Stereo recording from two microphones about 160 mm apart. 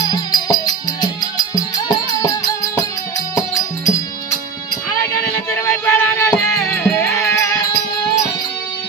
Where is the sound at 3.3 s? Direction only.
20° left (ahead or behind).